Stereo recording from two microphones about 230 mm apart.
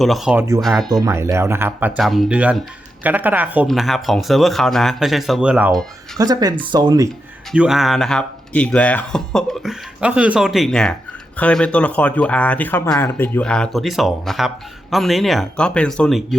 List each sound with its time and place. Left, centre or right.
0.0 s speech: centre
0.9 s speech: centre
7.5 s speech: centre